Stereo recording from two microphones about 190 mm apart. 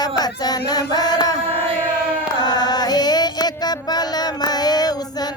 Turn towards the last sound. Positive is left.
turn(degrees=20)  # may be behind; listen again after turning